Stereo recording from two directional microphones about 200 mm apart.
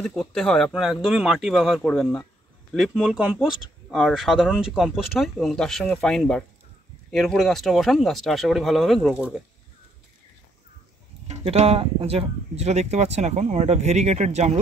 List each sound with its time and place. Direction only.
0.0 s speech: 5° left (ahead or behind)
11.2 s speech: 35° right (ahead or behind)